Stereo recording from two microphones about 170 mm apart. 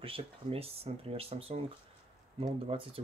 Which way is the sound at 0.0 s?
35° right (ahead or behind).